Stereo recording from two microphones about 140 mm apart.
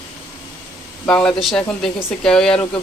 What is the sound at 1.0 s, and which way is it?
Speech, 5° left (ahead or behind).